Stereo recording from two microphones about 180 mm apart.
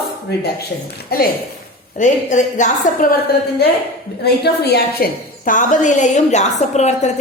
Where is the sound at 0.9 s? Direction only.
55° left (ahead or behind).